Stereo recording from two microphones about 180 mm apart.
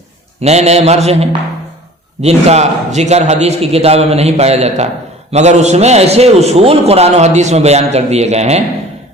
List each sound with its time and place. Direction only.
0.4 s a man's voice: 35° right (ahead or behind)